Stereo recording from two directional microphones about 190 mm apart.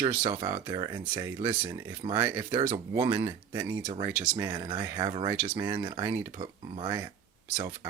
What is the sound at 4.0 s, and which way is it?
Speech, 15° right (ahead or behind).